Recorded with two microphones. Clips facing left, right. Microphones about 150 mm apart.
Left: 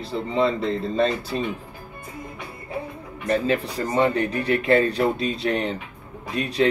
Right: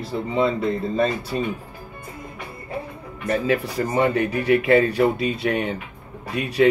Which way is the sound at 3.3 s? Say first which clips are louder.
Even; 25° left (ahead or behind).